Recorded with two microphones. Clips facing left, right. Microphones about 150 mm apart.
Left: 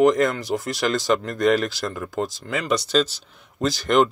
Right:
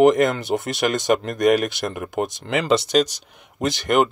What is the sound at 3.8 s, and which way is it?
Speech, 10° right (ahead or behind).